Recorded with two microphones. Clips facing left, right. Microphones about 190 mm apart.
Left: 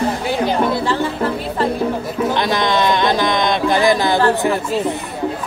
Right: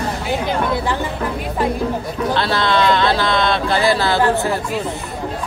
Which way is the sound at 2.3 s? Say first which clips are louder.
Right 1 dB; 15° left (ahead or behind).